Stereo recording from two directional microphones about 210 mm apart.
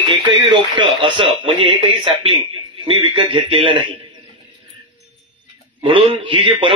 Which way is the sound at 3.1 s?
25° right (ahead or behind).